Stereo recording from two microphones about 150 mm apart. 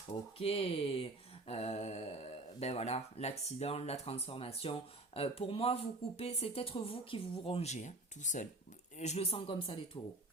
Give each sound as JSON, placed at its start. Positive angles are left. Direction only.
{"t": 0.1, "sound": "a man's voice", "side_deg": 40}